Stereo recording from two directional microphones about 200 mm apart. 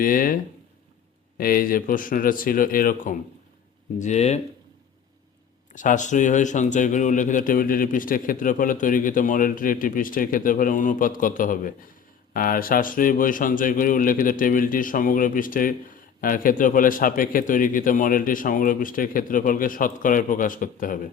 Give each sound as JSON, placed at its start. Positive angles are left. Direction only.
{"t": 0.0, "sound": "speech", "side_deg": 45}
{"t": 1.4, "sound": "speech", "side_deg": 45}
{"t": 5.7, "sound": "speech", "side_deg": 40}